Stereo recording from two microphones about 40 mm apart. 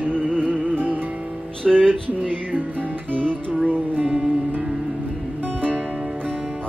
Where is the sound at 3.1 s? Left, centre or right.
Right.